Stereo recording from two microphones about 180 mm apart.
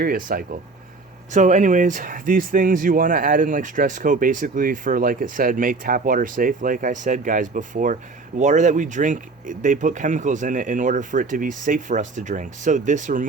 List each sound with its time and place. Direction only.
0.0 s speech: 50° right (ahead or behind)